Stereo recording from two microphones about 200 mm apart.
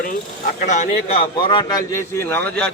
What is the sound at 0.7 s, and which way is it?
A man's voice, 30° left (ahead or behind).